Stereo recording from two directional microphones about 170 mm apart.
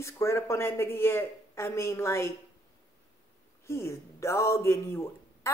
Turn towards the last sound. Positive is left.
turn(degrees=15)  # may be behind; listen again after turning